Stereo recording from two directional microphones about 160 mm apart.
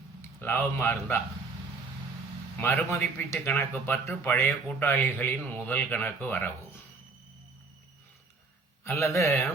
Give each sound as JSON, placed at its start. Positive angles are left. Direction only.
{"t": 0.2, "sound": "speech", "side_deg": 15}
{"t": 2.6, "sound": "a man's voice", "side_deg": 10}
{"t": 8.8, "sound": "a man's voice", "side_deg": 15}